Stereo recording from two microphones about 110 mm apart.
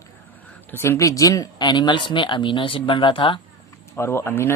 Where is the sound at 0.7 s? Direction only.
25° left (ahead or behind); by 3.4 s 50° left (ahead or behind).